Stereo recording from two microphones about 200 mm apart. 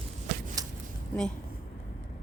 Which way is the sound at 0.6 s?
20° right (ahead or behind).